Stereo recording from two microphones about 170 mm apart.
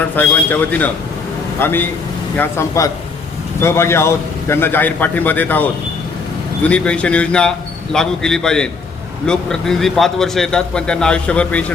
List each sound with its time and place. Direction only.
0.2 s a man's voice: 10° left (ahead or behind)